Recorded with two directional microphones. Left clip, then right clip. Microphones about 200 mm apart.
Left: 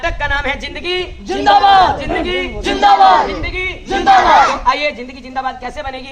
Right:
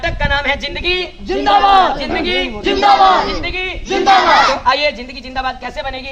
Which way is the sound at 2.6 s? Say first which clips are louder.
Left 1 dB; 15° left (ahead or behind).